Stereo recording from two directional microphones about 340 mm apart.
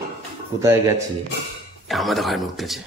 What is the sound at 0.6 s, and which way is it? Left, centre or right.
Speech, centre.